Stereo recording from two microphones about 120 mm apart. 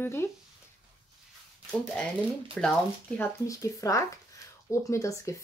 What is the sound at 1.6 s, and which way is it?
Speech, 5° left (ahead or behind).